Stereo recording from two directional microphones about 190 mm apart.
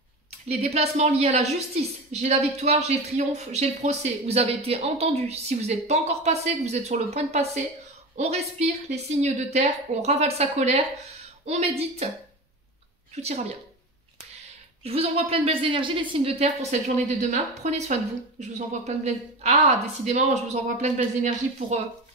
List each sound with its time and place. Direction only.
0.5 s a woman's voice: 35° right (ahead or behind)
13.1 s a woman's voice: 35° right (ahead or behind)
14.8 s a woman's voice: 30° right (ahead or behind)